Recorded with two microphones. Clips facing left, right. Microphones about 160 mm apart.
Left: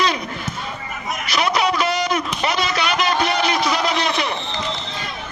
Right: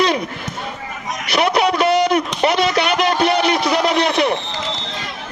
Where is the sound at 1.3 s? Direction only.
60° right (ahead or behind).